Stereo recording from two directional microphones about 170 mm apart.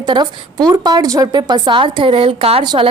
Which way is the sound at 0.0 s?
25° right (ahead or behind).